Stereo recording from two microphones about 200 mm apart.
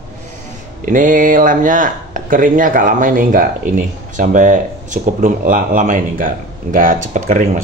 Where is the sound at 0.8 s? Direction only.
40° right (ahead or behind).